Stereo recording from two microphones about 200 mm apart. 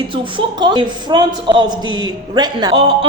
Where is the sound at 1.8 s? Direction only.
80° right.